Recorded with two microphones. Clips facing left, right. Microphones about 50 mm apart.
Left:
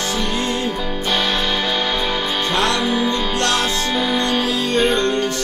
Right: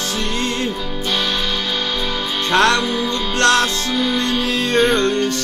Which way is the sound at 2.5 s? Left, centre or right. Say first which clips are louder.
Right 6 dB; right.